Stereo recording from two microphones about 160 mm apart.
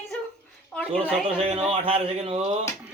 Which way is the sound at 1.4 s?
35° right (ahead or behind).